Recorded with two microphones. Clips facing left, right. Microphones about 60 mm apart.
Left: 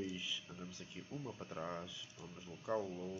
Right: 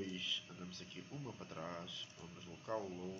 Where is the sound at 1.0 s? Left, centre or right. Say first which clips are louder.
Left 4 dB; left.